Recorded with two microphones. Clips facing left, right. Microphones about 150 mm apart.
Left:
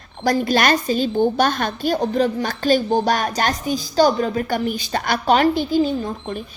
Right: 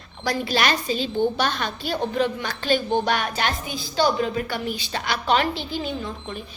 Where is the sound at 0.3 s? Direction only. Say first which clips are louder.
Left 6 dB; 45° left (ahead or behind).